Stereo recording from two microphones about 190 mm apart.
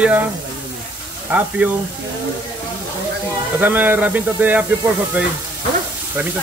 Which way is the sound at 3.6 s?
10° right (ahead or behind).